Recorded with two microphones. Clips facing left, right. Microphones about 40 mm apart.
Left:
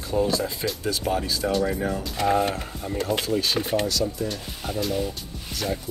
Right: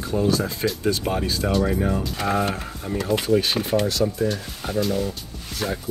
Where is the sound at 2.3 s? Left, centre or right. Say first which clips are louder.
Left 1 dB; right.